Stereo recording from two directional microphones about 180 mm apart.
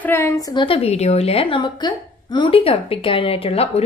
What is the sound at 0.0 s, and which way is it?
Speech, 15° left (ahead or behind).